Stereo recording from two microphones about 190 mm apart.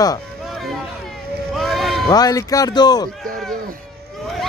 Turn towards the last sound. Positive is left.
turn(degrees=20)  # may be behind; listen again after turning